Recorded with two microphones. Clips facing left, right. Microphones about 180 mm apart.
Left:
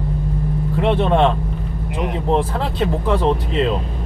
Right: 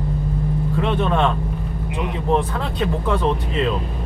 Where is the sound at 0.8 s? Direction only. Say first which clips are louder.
Left 5 dB; 35° left (ahead or behind).